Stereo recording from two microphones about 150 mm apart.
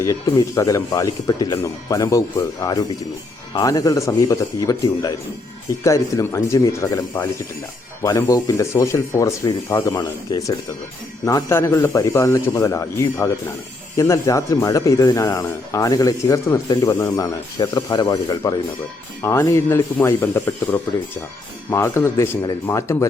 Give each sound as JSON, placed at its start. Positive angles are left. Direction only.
{"t": 0.0, "sound": "speech", "side_deg": 20}